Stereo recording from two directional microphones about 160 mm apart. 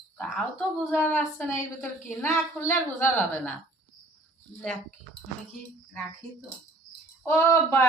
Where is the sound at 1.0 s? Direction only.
10° left (ahead or behind).